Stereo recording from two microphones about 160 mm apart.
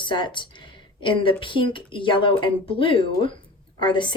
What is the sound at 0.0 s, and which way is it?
Speech, 30° left (ahead or behind).